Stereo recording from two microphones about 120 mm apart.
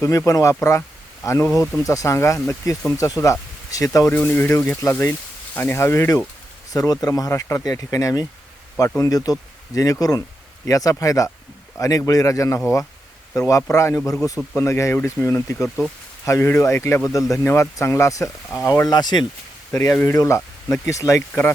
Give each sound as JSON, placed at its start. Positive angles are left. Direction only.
{"t": 0.0, "sound": "speech", "side_deg": 25}
{"t": 4.1, "sound": "speech", "side_deg": 15}